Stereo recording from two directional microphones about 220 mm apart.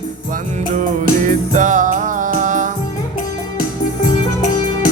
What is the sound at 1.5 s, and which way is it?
Music, 35° right (ahead or behind).